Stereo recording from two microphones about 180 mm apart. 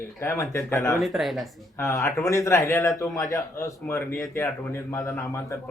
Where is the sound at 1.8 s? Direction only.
15° left (ahead or behind).